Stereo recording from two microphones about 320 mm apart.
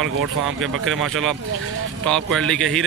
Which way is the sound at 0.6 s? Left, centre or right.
Right.